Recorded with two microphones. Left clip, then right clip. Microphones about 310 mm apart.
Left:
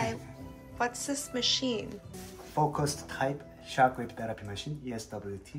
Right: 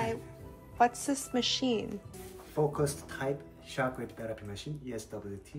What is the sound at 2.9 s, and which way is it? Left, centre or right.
Speech, centre.